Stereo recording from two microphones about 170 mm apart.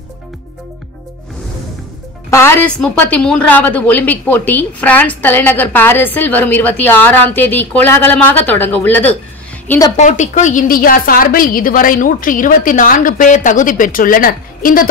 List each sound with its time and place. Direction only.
2.3 s a woman's voice: 15° left (ahead or behind)
9.9 s a woman's voice: 45° left (ahead or behind)